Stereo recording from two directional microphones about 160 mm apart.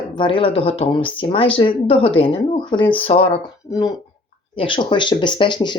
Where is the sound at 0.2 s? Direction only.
35° left (ahead or behind).